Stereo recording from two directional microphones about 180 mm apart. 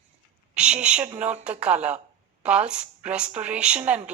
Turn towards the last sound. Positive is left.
turn(degrees=-10)  # may be behind; listen again after turning